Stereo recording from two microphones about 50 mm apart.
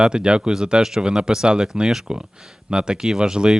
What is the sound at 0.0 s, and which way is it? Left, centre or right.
Speech, centre.